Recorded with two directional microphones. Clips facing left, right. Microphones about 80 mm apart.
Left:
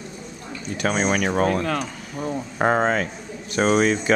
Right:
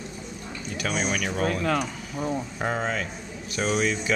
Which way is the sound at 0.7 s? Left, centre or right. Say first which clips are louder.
Left 6 dB; left.